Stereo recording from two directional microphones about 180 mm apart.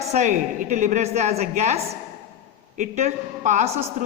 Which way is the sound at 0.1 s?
40° right (ahead or behind).